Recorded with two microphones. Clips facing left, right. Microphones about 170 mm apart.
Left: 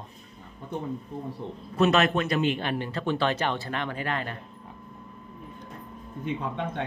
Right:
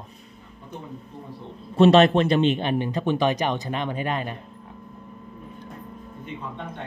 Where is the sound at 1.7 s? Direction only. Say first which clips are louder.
Right 7 dB; 30° right (ahead or behind).